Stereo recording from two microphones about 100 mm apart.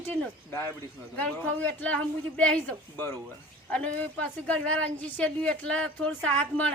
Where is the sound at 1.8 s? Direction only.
15° left (ahead or behind).